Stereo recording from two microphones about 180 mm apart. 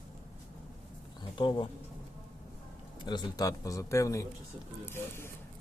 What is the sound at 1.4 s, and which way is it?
Speech, 25° left (ahead or behind).